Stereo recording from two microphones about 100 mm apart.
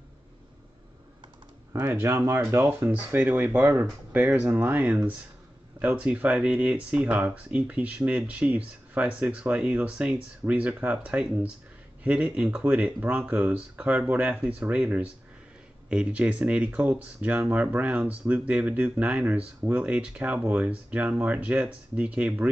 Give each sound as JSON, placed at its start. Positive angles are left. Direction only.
{"t": 1.7, "sound": "speech", "side_deg": -20}